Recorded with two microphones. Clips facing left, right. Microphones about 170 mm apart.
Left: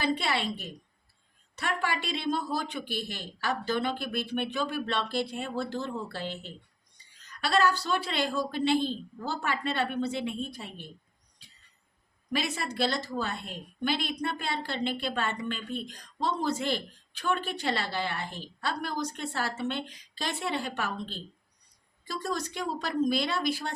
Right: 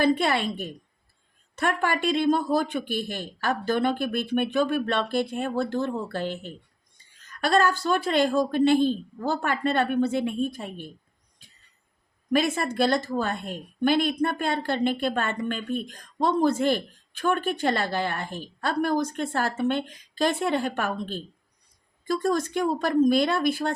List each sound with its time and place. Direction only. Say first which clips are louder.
0.0 s speech: right 7 dB; 50° right (ahead or behind)
12.3 s speech: right 8 dB; 50° right (ahead or behind)